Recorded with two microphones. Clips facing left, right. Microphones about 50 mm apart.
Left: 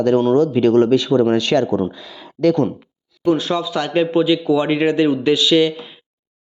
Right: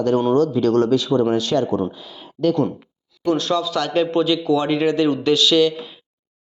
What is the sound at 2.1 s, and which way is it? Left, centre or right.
Speech, left.